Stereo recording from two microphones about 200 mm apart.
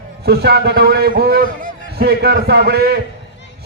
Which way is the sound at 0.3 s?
55° right (ahead or behind).